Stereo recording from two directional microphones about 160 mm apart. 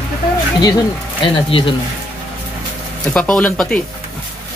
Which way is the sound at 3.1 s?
5° left (ahead or behind).